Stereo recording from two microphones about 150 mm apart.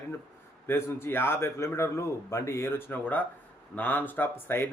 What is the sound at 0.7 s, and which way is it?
Speech, 15° left (ahead or behind).